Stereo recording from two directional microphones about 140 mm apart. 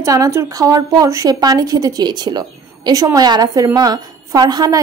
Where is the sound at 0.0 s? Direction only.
25° right (ahead or behind).